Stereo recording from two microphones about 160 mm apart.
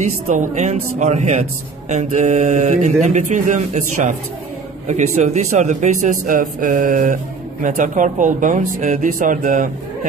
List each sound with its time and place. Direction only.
0.3 s a man's voice: 50° right (ahead or behind)